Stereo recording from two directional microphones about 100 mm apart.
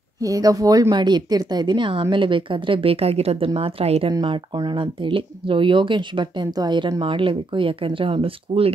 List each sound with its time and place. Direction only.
0.2 s speech: 35° right (ahead or behind); by 4.1 s 80° right
4.1 s speech: 45° right (ahead or behind); by 8.7 s 70° right (ahead or behind)